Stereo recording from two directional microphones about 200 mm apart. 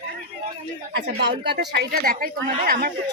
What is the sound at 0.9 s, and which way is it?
Speech, 60° right (ahead or behind).